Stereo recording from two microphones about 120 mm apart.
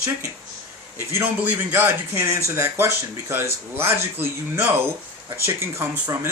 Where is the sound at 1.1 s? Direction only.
15° right (ahead or behind).